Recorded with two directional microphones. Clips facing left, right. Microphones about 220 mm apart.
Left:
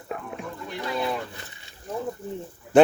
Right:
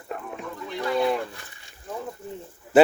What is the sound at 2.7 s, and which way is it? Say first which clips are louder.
Speech: even; 5° right (ahead or behind).